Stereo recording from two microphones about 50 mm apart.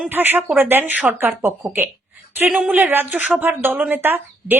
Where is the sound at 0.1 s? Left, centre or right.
Right.